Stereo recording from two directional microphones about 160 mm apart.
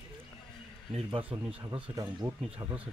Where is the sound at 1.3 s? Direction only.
20° right (ahead or behind).